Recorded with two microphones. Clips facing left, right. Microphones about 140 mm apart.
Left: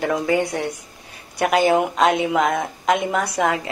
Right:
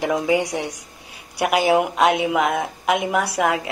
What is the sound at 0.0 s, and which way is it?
A woman's voice, 15° right (ahead or behind).